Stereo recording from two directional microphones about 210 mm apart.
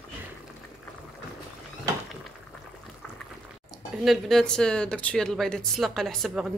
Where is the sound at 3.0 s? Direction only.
5° left (ahead or behind).